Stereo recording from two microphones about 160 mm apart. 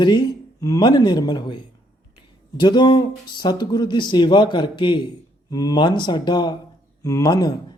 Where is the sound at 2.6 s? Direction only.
25° left (ahead or behind).